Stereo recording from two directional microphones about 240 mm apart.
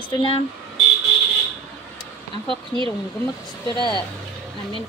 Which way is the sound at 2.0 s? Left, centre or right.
Right.